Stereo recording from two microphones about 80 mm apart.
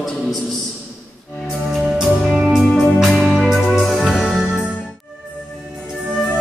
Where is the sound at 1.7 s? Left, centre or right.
Centre.